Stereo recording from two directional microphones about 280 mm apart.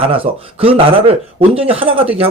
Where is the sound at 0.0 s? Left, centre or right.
Centre.